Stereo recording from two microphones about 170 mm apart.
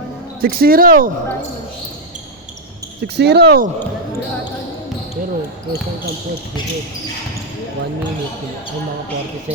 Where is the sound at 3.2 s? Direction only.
80° right.